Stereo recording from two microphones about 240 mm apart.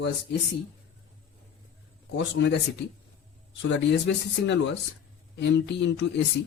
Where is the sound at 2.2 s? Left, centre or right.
Left.